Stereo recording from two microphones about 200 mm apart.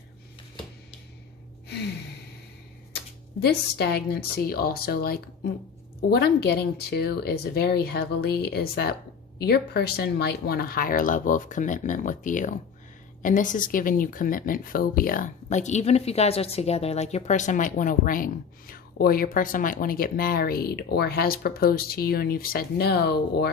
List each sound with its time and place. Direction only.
1.6 s gasp: 55° left (ahead or behind)
3.4 s speech: 55° left (ahead or behind)